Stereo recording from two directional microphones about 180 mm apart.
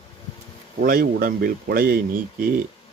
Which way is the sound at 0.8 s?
55° right (ahead or behind).